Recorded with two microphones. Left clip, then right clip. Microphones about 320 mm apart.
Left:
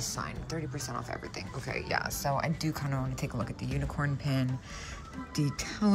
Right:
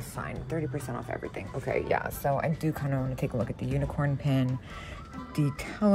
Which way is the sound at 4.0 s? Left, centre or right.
Right.